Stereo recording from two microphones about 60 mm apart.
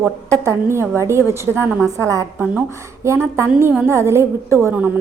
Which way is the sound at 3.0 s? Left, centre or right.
Right.